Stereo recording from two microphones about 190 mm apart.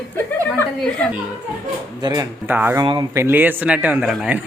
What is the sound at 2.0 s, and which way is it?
A woman's voice, 20° right (ahead or behind).